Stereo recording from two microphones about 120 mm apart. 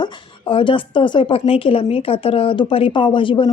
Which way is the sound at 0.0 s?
45° left (ahead or behind).